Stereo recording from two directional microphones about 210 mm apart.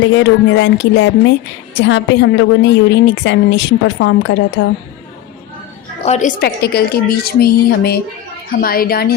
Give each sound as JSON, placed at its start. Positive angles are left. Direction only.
{"t": 0.0, "sound": "a woman's voice", "side_deg": 60}
{"t": 6.1, "sound": "a woman's voice", "side_deg": 35}